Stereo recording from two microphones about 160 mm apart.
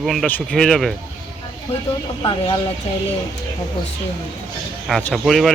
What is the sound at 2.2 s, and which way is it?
Speech, 30° left (ahead or behind).